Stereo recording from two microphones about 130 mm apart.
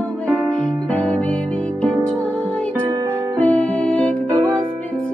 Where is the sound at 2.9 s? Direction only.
30° right (ahead or behind).